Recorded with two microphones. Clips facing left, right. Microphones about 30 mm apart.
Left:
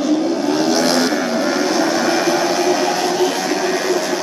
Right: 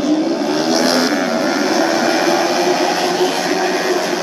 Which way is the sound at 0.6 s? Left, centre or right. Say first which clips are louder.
Right 1 dB; right.